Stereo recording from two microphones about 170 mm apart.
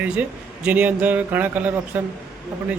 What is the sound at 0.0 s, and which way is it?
A man's voice, 5° right (ahead or behind).